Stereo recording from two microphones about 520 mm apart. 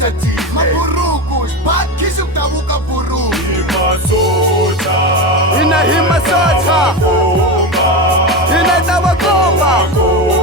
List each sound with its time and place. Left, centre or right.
0.6 s music: right
5.5 s music: centre
8.3 s music: centre